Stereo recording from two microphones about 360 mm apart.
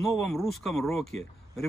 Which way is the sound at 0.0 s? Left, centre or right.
Centre.